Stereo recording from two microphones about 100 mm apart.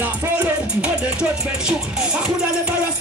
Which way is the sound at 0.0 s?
15° right (ahead or behind).